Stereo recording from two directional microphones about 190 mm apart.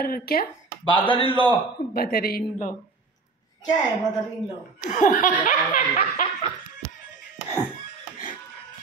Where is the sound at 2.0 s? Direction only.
50° left (ahead or behind).